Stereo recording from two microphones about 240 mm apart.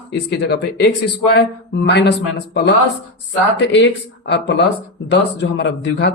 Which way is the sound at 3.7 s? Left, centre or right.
Left.